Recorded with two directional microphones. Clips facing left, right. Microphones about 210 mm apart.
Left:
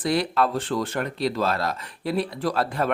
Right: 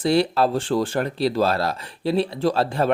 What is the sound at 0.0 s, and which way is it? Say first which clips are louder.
Speech: right 4 dB; 30° right (ahead or behind).